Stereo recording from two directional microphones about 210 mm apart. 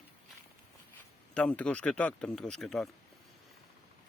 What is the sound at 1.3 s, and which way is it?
Speech, 5° left (ahead or behind).